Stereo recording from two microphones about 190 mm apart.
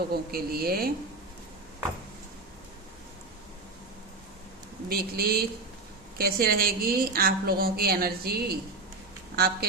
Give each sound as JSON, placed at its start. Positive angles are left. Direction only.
{"t": 0.1, "sound": "a woman's voice", "side_deg": -55}
{"t": 4.9, "sound": "a woman's voice", "side_deg": -55}